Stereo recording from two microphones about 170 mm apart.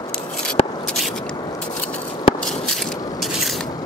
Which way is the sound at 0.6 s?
35° left (ahead or behind).